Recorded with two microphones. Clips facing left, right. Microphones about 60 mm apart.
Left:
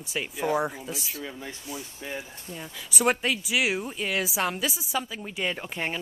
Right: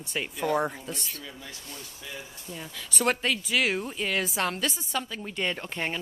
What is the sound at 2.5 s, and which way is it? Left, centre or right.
Speech, centre.